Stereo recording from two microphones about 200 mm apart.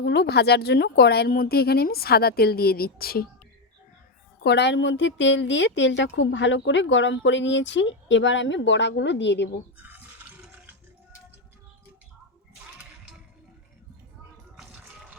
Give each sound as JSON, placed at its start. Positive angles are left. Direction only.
{"t": 0.0, "sound": "speech", "side_deg": 55}
{"t": 4.4, "sound": "a woman's voice", "side_deg": 60}
{"t": 9.7, "sound": "a sound", "side_deg": -10}
{"t": 14.5, "sound": "music", "side_deg": -5}